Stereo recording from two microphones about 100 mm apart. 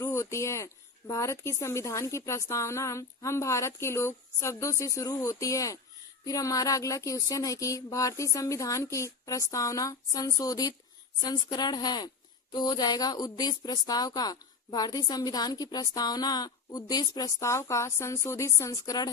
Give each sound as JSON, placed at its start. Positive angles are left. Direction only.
{"t": 0.0, "sound": "speech", "side_deg": 30}